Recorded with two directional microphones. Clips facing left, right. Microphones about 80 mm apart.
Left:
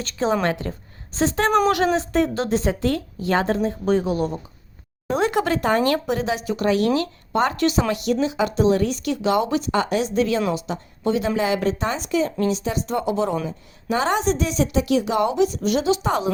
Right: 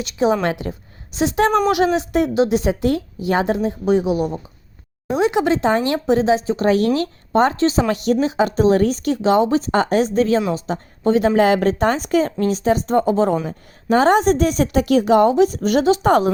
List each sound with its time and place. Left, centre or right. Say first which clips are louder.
0.0 s a woman's voice: right 3 dB; centre; by 16.3 s right